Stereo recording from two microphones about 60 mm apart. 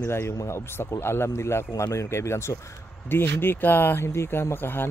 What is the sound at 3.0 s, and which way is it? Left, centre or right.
Speech, left.